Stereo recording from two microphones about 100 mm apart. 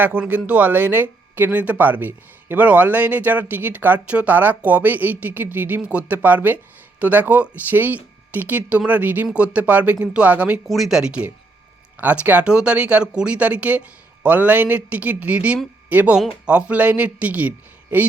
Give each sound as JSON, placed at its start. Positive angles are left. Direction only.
{"t": 0.0, "sound": "speech", "side_deg": -15}
{"t": 10.7, "sound": "speech", "side_deg": 0}